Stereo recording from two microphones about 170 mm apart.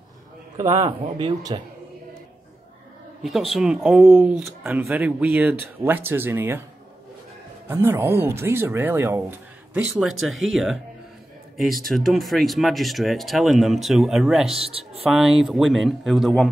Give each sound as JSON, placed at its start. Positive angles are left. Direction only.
{"t": 0.8, "sound": "speech", "side_deg": -30}
{"t": 3.2, "sound": "speech", "side_deg": 0}
{"t": 7.6, "sound": "speech", "side_deg": -15}
{"t": 14.5, "sound": "a man's voice", "side_deg": -35}
{"t": 15.0, "sound": "speech", "side_deg": 0}